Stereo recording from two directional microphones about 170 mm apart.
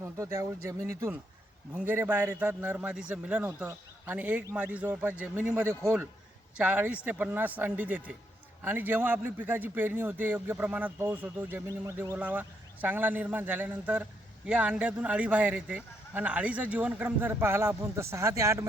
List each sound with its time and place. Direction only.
0.0 s a man's voice: 15° right (ahead or behind)